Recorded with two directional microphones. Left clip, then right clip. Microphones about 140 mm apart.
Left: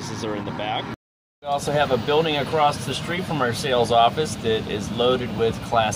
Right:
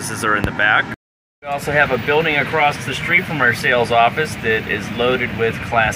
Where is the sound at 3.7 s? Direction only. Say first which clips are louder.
Even; 15° right (ahead or behind).